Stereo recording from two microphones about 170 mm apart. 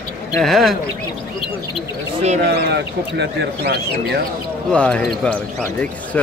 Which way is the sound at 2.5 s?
80° right.